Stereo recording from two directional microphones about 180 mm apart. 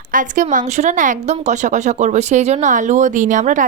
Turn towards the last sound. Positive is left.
turn(degrees=-45)  # may be behind; listen again after turning